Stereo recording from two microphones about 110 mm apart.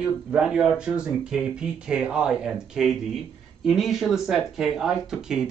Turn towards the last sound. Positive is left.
turn(degrees=-5)  # may be behind; listen again after turning